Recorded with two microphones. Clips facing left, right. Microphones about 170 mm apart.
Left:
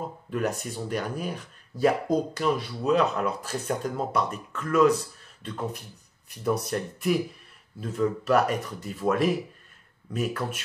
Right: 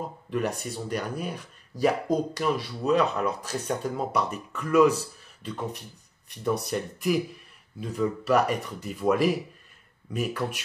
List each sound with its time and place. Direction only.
0.3 s speech: centre (ahead or behind)